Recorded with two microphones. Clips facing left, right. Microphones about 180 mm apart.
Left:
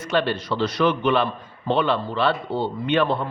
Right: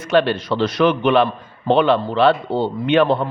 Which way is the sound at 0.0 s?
90° right.